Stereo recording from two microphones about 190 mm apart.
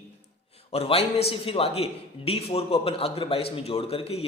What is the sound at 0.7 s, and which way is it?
A man's voice, 30° left (ahead or behind).